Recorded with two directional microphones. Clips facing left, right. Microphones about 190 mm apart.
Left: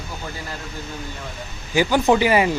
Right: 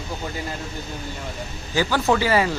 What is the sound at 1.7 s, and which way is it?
Speech, 15° left (ahead or behind).